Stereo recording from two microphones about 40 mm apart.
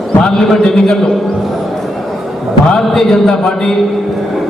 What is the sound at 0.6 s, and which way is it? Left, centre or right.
Speech, centre.